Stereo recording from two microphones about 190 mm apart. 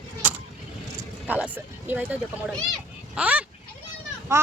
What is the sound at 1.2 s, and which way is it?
Speech, 10° right (ahead or behind).